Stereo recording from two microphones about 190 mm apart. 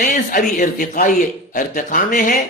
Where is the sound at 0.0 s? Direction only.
45° left (ahead or behind).